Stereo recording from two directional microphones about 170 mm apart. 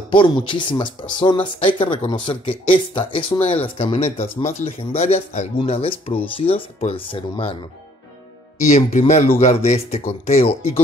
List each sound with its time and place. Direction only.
0.1 s speech: 30° left (ahead or behind)
4.2 s speech: 45° left (ahead or behind)
8.6 s speech: 45° left (ahead or behind)